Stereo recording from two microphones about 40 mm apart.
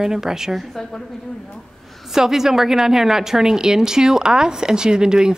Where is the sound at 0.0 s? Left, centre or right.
Centre.